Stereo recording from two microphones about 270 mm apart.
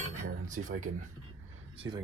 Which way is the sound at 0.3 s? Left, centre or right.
Right.